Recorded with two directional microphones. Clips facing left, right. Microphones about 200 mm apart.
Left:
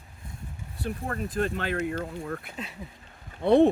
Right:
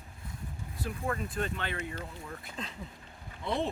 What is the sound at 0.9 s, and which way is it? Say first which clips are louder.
Speech: left 3 dB; 45° left (ahead or behind).